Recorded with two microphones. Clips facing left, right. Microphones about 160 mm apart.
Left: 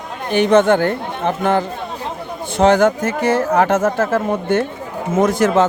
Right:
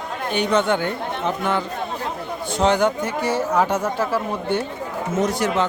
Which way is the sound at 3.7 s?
45° left (ahead or behind).